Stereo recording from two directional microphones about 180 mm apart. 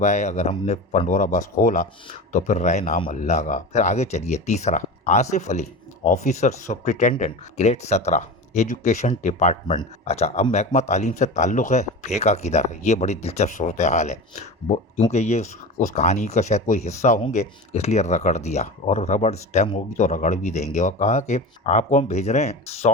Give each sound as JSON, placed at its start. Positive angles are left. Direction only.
{"t": 0.0, "sound": "speech", "side_deg": 40}